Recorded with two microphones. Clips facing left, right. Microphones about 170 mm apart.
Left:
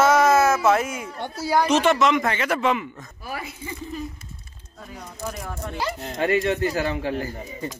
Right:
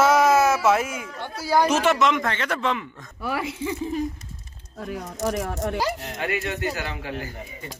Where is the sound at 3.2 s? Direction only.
75° right (ahead or behind).